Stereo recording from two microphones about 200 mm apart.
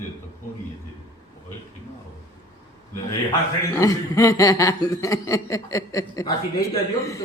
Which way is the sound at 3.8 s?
15° left (ahead or behind).